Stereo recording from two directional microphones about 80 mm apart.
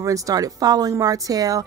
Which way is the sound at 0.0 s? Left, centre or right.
Right.